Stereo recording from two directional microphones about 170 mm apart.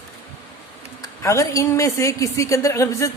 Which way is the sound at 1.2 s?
20° left (ahead or behind).